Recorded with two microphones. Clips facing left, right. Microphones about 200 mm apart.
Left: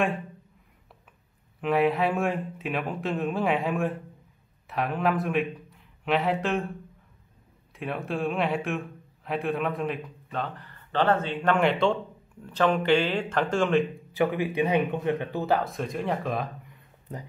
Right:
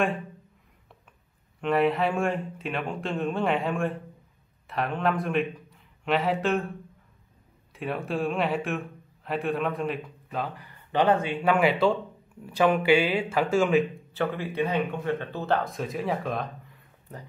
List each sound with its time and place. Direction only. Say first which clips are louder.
1.6 s a man's voice: even; centre (ahead or behind)
7.7 s a man's voice: right 1 dB; centre (ahead or behind)
14.1 s speech: left 3 dB; 15° left (ahead or behind)